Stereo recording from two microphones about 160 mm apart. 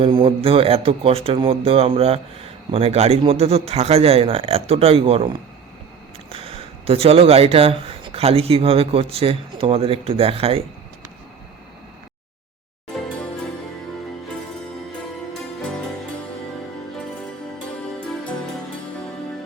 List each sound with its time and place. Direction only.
0.0 s speech: 35° right (ahead or behind)
6.3 s speech: 35° right (ahead or behind)